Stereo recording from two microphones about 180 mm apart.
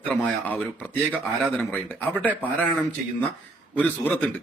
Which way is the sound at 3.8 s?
10° left (ahead or behind).